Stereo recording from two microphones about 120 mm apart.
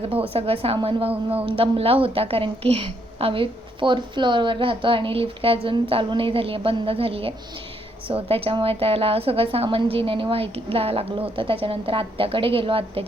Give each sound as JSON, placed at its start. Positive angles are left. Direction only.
{"t": 0.1, "sound": "a woman's voice", "side_deg": -50}